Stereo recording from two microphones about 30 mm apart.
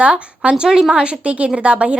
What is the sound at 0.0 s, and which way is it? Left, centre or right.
Speech, right.